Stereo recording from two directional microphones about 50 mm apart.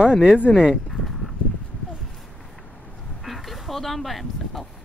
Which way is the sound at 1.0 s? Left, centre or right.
Centre.